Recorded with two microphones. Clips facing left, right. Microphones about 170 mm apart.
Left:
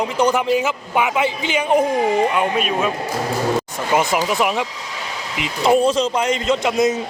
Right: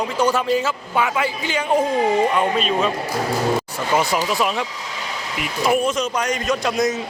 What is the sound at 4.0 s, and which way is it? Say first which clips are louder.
A man's voice: left 2 dB; 20° left (ahead or behind).